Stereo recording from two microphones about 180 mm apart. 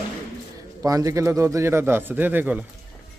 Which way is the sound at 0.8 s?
20° right (ahead or behind).